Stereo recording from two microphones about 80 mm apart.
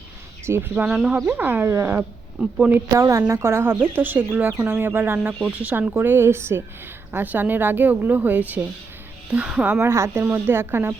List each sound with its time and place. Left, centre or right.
0.4 s speech: right
0.9 s speech: centre
1.3 s speech: right
1.6 s a woman's voice: right
2.6 s speech: centre
2.9 s speech: right; by 5.9 s centre
5.9 s a woman's voice: right; by 9.8 s centre
9.8 s speech: right